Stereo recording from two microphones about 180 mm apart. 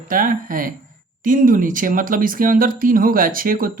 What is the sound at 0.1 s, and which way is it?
Speech, 50° right (ahead or behind).